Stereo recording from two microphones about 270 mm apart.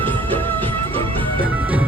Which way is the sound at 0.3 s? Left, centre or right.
Centre.